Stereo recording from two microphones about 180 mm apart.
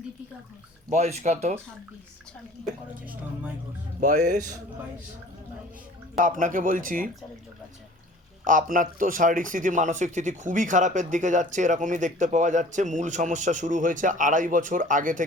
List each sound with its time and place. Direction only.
0.9 s speech: 40° right (ahead or behind)
4.0 s speech: 45° right (ahead or behind)
6.1 s speech: 45° right (ahead or behind)
8.4 s speech: 50° right (ahead or behind)